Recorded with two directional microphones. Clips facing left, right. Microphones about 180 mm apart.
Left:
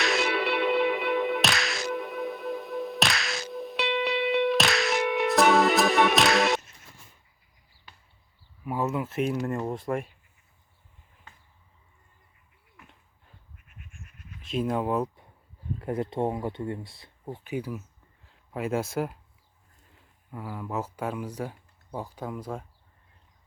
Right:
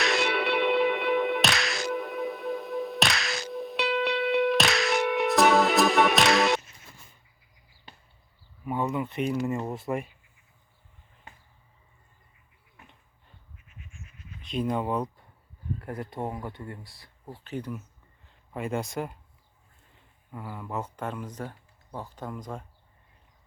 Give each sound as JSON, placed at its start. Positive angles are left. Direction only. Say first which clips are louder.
{"t": 0.0, "sound": "music", "louder": "even", "side_deg": 0}
{"t": 8.6, "sound": "speech", "louder": "even", "side_deg": 0}
{"t": 13.7, "sound": "a sound", "louder": "right 1 dB", "side_deg": 55}
{"t": 14.4, "sound": "speech", "louder": "left 1 dB", "side_deg": 5}
{"t": 15.8, "sound": "speech", "louder": "left 7 dB", "side_deg": 20}
{"t": 20.3, "sound": "speech", "louder": "left 2 dB", "side_deg": 0}